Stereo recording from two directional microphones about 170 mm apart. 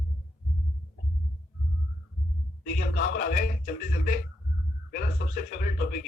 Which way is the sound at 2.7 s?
50° left (ahead or behind).